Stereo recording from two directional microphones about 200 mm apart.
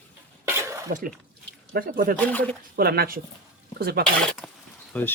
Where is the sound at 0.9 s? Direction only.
40° right (ahead or behind).